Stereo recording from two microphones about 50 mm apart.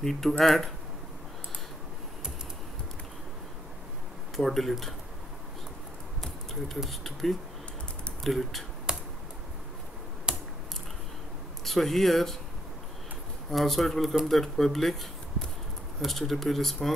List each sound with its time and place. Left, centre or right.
0.0 s speech: centre
4.4 s speech: centre
6.2 s typing: centre
6.9 s speech: centre
8.9 s computer keyboard: centre
10.3 s computer keyboard: centre
11.6 s speech: centre
13.5 s speech: centre